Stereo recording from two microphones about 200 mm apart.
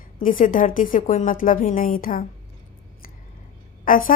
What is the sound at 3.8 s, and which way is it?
Speech, 45° left (ahead or behind).